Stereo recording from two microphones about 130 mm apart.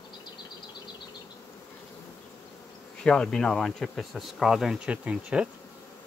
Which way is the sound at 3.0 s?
5° left (ahead or behind).